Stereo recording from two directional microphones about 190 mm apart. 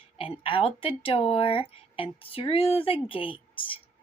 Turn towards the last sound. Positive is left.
turn(degrees=25)  # may be behind; listen again after turning